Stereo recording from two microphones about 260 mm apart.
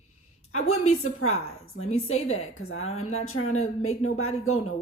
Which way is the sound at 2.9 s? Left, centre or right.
Left.